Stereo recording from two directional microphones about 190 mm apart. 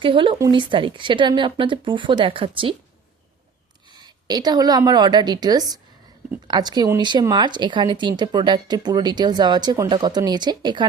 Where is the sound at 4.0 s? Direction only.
20° right (ahead or behind).